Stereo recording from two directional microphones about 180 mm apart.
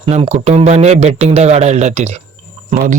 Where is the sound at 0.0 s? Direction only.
30° right (ahead or behind).